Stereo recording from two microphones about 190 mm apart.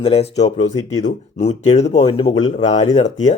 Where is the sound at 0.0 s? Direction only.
30° left (ahead or behind).